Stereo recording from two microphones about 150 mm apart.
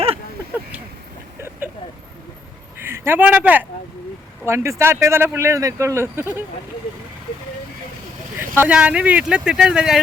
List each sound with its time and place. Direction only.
1.4 s vehicle: 15° right (ahead or behind)
2.8 s speech: 15° right (ahead or behind)
8.4 s speech: 10° right (ahead or behind)